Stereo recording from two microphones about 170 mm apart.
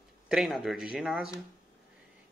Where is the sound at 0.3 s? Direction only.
5° right (ahead or behind).